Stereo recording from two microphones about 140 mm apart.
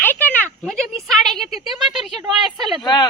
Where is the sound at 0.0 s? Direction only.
15° left (ahead or behind).